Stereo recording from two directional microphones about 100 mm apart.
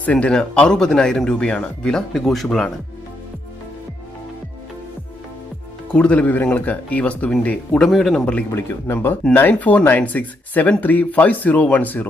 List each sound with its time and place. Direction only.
0.0 s speech: 15° left (ahead or behind)
5.9 s a man's voice: 15° left (ahead or behind)
8.5 s speech: 25° left (ahead or behind)